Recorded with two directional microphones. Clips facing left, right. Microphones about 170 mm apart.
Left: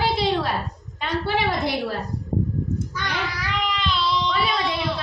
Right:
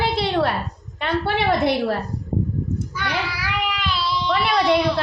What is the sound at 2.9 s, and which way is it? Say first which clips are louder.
Child singing: right 2 dB; 10° right (ahead or behind).